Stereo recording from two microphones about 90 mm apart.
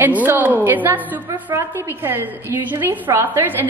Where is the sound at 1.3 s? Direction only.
30° right (ahead or behind).